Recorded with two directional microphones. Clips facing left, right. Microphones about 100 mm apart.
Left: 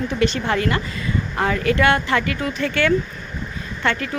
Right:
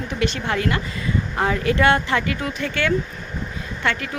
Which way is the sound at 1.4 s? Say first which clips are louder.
Left 1 dB; 15° right (ahead or behind).